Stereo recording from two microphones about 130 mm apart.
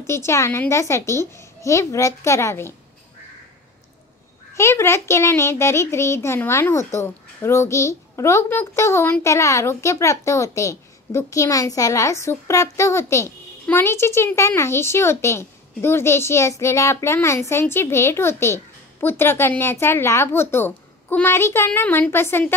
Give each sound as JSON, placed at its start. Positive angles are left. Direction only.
{"t": 0.0, "sound": "a child's voice", "side_deg": 20}
{"t": 4.6, "sound": "a child's voice", "side_deg": 20}